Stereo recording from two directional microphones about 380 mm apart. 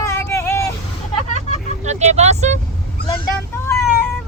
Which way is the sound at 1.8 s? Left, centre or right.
Centre.